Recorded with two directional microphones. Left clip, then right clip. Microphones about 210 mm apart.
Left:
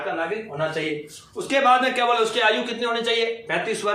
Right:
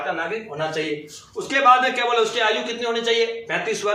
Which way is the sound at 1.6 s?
15° left (ahead or behind).